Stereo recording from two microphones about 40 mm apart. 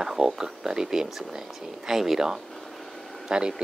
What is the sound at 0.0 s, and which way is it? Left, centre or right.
Speech, centre.